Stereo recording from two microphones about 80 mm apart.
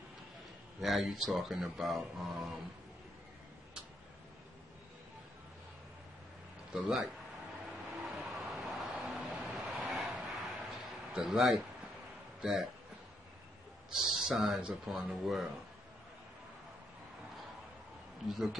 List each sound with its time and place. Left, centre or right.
0.7 s speech: centre
6.7 s speech: centre
7.7 s vehicle: centre
9.9 s a sound: centre
12.4 s speech: centre
13.9 s speech: centre
18.3 s speech: centre